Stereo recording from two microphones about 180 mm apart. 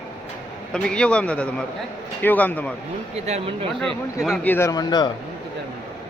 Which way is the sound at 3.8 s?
Centre (ahead or behind).